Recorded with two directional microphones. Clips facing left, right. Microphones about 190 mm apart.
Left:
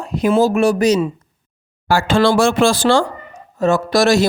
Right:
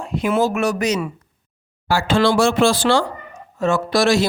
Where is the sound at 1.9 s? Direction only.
50° left (ahead or behind).